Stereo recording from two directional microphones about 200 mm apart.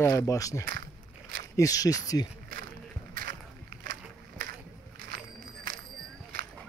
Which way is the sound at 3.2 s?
45° right (ahead or behind).